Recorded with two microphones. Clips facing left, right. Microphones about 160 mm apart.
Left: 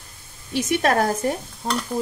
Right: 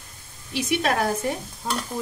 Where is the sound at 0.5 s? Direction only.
45° left (ahead or behind).